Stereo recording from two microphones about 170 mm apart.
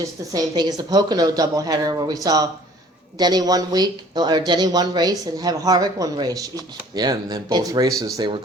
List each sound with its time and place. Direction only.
0.0 s speech: 20° right (ahead or behind)